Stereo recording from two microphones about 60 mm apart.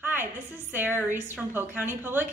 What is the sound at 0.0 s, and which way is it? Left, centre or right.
A woman's voice, right.